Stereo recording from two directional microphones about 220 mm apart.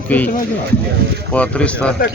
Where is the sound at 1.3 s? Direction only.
5° left (ahead or behind).